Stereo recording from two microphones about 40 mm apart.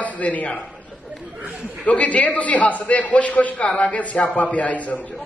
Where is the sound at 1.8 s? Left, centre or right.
Left.